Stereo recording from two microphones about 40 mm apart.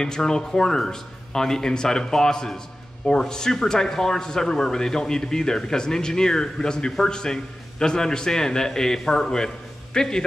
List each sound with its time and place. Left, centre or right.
0.0 s speech: centre